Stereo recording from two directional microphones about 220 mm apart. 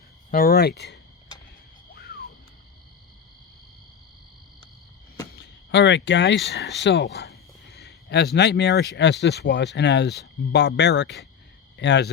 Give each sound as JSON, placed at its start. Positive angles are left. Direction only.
{"t": 0.3, "sound": "speech", "side_deg": 40}
{"t": 5.4, "sound": "speech", "side_deg": 55}